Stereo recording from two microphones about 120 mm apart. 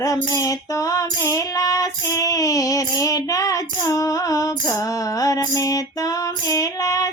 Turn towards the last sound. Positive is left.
turn(degrees=30)  # may be behind; listen again after turning